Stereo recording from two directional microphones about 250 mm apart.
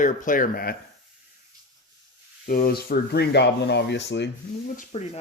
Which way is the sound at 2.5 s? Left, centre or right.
Left.